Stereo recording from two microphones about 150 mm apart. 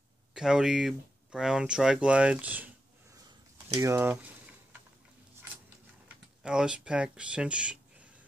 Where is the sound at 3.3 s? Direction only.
30° right (ahead or behind); by 4.4 s 10° right (ahead or behind).